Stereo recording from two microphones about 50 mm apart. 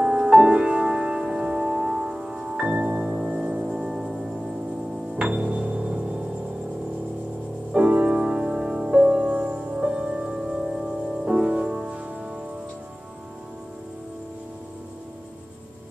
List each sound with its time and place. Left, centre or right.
0.0 s music: right
5.1 s music: right
7.7 s music: right
9.8 s music: centre